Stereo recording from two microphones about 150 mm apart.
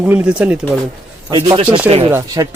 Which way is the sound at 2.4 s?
25° right (ahead or behind).